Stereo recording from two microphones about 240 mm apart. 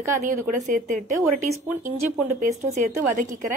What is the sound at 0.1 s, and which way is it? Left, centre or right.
Speech, right.